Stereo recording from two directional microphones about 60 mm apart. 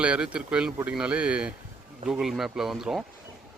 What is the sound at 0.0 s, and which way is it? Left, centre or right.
A man's voice, centre.